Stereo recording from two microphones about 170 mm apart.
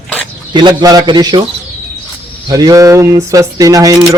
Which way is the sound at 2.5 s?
20° right (ahead or behind).